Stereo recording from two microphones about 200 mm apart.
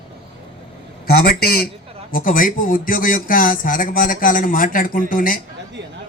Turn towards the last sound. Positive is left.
turn(degrees=45)  # may be behind; listen again after turning